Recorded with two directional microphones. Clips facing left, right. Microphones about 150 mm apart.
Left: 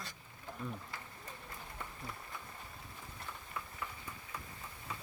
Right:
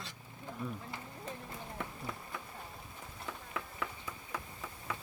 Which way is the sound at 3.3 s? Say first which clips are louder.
Right 5 dB; 85° right.